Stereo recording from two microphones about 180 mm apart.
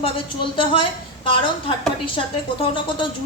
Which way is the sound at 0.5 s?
30° left (ahead or behind).